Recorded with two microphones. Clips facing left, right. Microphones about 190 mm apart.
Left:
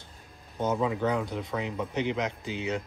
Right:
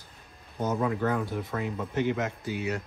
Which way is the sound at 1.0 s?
20° left (ahead or behind).